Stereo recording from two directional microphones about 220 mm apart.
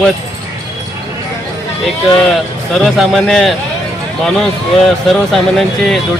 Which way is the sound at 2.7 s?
Centre (ahead or behind).